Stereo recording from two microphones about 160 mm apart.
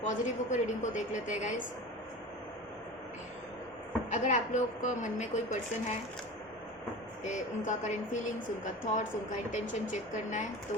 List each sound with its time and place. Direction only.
0.0 s a woman's voice: 50° left (ahead or behind)
4.1 s a woman's voice: 50° left (ahead or behind)
7.3 s a woman's voice: 50° left (ahead or behind)